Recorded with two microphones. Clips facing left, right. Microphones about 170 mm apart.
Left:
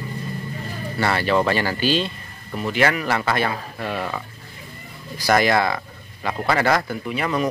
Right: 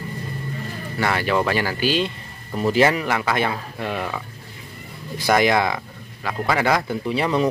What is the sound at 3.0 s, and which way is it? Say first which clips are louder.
Speech: even; 10° right (ahead or behind).